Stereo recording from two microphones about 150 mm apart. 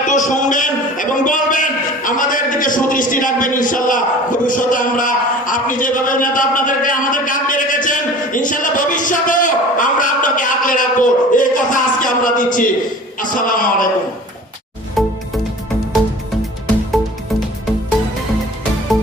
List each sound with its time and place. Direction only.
0.1 s a man's voice: 55° left (ahead or behind)
15.0 s music: centre (ahead or behind)